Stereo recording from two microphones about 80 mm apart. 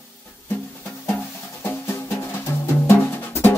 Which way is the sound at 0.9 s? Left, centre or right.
Left.